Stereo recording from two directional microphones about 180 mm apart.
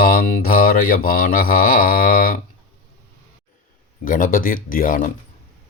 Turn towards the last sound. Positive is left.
turn(degrees=50)  # may be behind; listen again after turning